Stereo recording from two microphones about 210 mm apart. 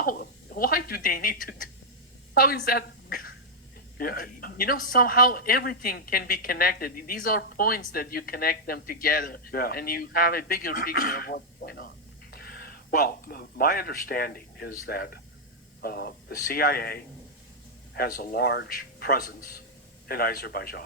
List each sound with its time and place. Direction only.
0.0 s a woman's voice: 45° left (ahead or behind)